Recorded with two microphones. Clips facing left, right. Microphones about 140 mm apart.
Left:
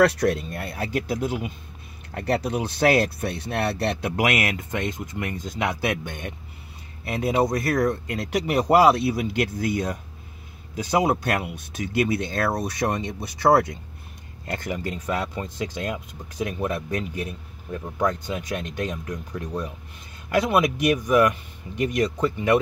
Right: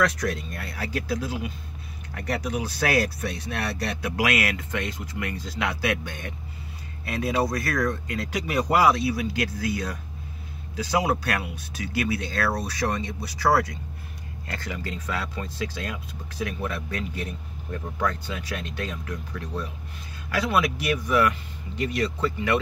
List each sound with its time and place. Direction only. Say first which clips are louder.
0.0 s speech: left 6 dB; 30° left (ahead or behind)